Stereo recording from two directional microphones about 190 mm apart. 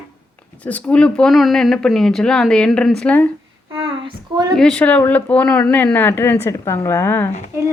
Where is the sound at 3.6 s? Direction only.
25° right (ahead or behind).